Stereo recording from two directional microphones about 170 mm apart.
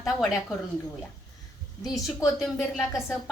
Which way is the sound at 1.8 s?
Centre (ahead or behind).